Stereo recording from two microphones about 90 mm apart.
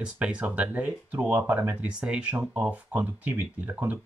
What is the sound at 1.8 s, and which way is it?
Speech, 10° right (ahead or behind).